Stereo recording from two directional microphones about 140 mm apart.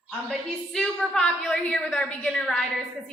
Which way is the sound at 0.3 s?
5° left (ahead or behind).